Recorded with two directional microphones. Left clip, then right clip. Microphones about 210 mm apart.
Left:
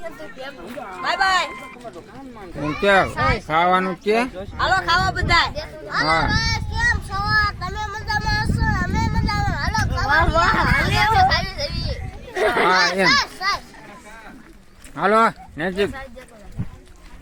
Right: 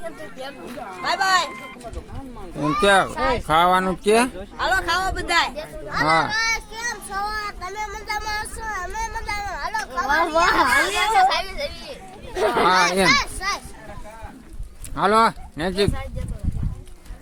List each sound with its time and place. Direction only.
1.0 s a man's voice: 10° right (ahead or behind)
2.8 s a man's voice: 15° right (ahead or behind)
5.9 s child singing: 5° right (ahead or behind)
12.4 s speech: 5° left (ahead or behind)
12.8 s a man's voice: 5° right (ahead or behind)
13.1 s a sound: 30° right (ahead or behind)
14.9 s speech: 5° right (ahead or behind)